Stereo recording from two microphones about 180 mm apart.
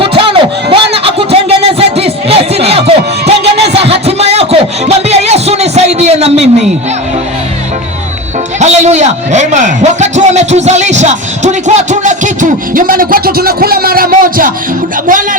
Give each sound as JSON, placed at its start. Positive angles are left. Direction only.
{"t": 0.0, "sound": "a sound", "side_deg": -30}
{"t": 2.0, "sound": "music", "side_deg": -35}
{"t": 8.5, "sound": "a man's voice", "side_deg": -40}